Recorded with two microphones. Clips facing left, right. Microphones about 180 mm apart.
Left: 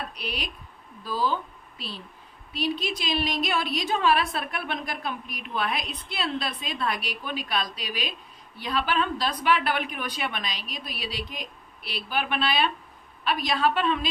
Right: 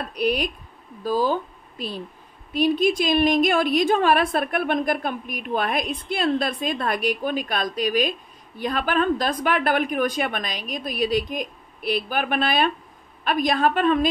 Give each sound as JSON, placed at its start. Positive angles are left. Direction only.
{"t": 0.1, "sound": "a woman's voice", "side_deg": -50}